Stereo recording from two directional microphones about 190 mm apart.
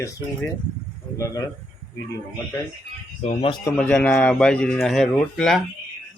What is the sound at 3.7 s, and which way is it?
A man's voice, 5° left (ahead or behind).